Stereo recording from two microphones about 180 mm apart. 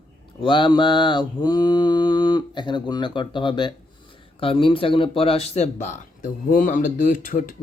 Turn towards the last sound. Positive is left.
turn(degrees=45)  # may be behind; listen again after turning